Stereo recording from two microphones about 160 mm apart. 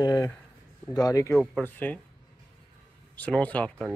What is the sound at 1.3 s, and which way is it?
Speech, centre (ahead or behind).